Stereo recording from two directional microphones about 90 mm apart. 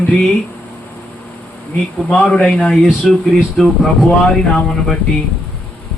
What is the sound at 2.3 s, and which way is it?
A man's voice, 15° left (ahead or behind).